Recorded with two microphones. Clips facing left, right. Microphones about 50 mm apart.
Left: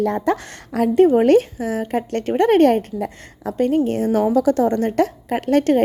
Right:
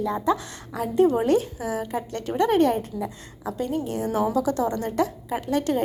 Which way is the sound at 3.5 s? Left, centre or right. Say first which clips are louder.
Left 9 dB; left.